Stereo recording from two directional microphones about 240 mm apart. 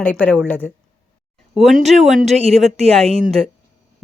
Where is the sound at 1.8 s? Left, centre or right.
Right.